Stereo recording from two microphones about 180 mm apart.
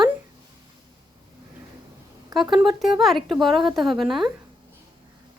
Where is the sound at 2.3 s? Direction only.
Centre (ahead or behind).